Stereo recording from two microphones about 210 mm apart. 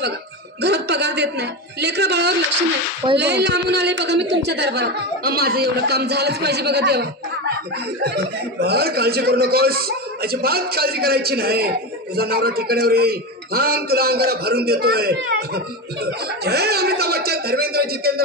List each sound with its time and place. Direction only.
0.6 s speech: 55° right (ahead or behind)